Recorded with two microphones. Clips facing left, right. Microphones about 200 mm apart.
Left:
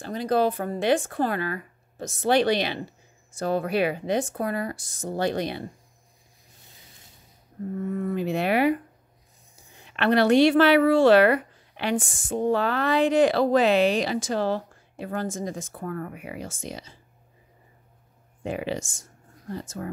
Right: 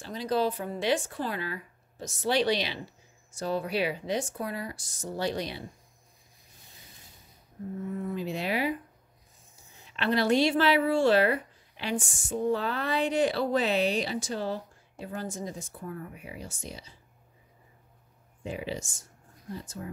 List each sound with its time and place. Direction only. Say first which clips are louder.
0.0 s speech: left 5 dB; 55° left (ahead or behind)
7.9 s a woman's voice: left 6 dB; 65° left (ahead or behind); by 12.3 s 90° left
12.3 s speech: left 4 dB; 60° left (ahead or behind); by 17.0 s 85° left
18.4 s speech: left 6 dB; 75° left (ahead or behind)